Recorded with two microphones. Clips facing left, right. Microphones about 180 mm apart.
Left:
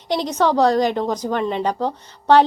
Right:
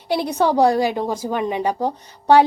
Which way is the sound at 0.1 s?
10° right (ahead or behind).